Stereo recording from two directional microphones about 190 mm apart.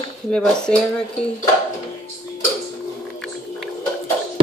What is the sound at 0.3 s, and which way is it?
Speech, 5° left (ahead or behind).